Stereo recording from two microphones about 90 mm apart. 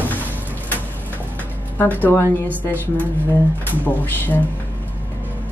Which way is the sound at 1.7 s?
20° left (ahead or behind).